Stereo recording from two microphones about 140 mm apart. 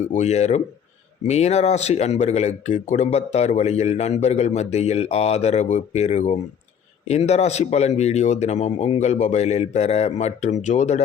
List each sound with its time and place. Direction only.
0.1 s a man's voice: 55° left (ahead or behind)